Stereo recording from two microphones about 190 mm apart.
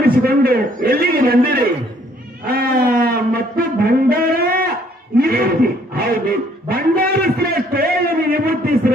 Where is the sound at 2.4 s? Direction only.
50° right (ahead or behind).